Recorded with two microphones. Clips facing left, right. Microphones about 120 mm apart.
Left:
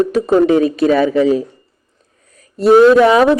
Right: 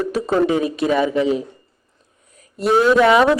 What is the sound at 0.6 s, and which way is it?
Speech, 25° right (ahead or behind).